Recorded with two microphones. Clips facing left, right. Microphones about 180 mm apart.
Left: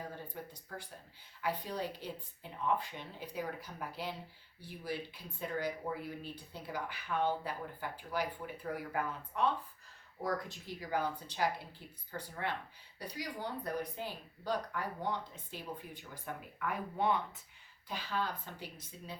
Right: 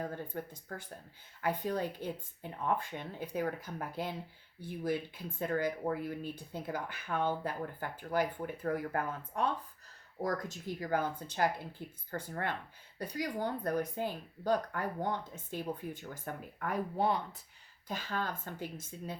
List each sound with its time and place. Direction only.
1.4 s speech: 50° right (ahead or behind)